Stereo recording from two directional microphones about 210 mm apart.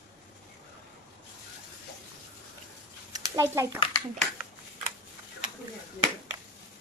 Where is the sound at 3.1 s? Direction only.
15° right (ahead or behind).